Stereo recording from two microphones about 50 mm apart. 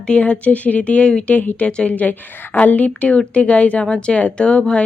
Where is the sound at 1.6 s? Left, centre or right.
Left.